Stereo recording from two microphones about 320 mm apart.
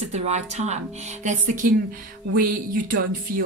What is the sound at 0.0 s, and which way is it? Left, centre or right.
Speech, right.